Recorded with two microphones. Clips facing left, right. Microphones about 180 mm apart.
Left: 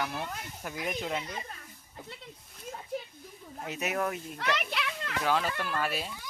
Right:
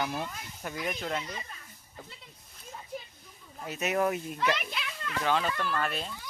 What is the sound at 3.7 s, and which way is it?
Speech, 10° left (ahead or behind).